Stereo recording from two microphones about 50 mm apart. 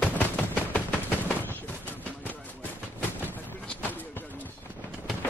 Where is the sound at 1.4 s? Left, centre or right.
Left.